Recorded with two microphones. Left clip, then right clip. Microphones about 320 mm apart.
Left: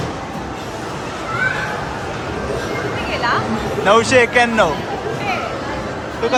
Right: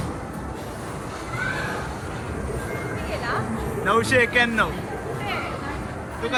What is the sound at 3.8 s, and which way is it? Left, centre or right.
Speech, centre.